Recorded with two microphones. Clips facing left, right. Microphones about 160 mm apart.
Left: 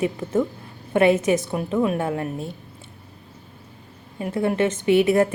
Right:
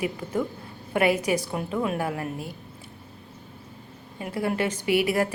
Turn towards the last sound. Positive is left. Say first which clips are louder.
# left 6 dB
turn(degrees=25)  # may be behind; listen again after turning